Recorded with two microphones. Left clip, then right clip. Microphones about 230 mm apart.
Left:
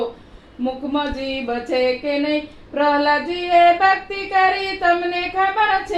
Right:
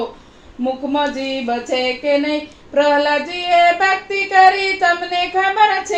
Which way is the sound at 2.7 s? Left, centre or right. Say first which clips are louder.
Right 3 dB; right.